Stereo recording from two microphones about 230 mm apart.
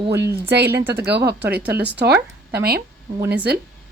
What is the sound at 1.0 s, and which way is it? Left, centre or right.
Speech, right.